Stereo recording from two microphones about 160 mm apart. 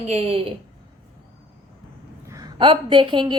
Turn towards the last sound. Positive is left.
turn(degrees=-30)  # may be behind; listen again after turning